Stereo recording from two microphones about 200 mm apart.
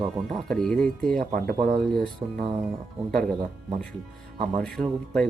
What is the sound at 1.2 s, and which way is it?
Speech, 45° right (ahead or behind).